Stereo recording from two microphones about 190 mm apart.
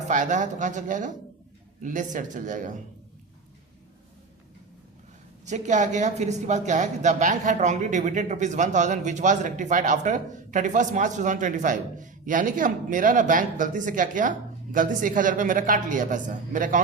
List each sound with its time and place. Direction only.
0.1 s speech: 40° right (ahead or behind)
5.5 s speech: 40° right (ahead or behind)